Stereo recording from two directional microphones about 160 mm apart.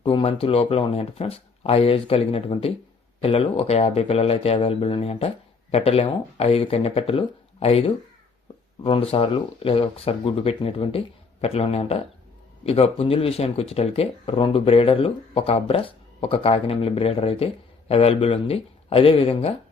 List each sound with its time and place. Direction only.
0.0 s speech: 35° left (ahead or behind)